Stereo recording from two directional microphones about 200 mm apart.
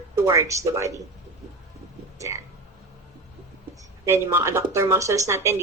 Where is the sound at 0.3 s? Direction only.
15° right (ahead or behind).